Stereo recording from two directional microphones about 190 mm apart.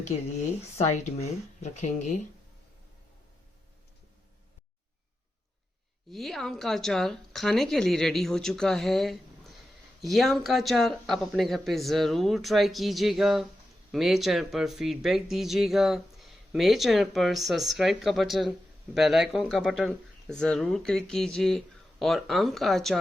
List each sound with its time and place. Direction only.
0.8 s speech: 35° left (ahead or behind)
6.1 s speech: centre (ahead or behind)